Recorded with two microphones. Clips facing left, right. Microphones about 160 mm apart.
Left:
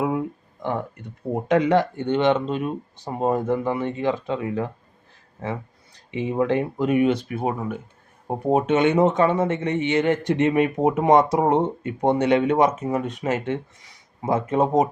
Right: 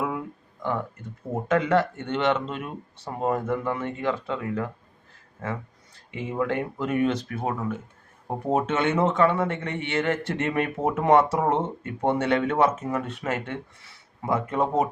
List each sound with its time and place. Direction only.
0.6 s speech: 25° left (ahead or behind)
6.1 s speech: 20° left (ahead or behind)